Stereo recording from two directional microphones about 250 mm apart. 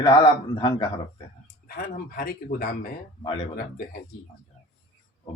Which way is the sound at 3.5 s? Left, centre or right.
Left.